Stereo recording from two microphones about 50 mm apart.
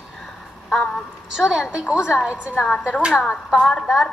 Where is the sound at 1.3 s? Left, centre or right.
Centre.